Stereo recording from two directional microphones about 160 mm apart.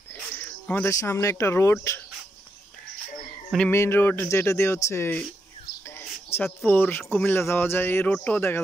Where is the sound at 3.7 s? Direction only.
15° left (ahead or behind).